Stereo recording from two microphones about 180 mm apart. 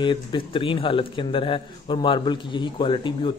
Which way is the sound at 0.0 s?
25° left (ahead or behind).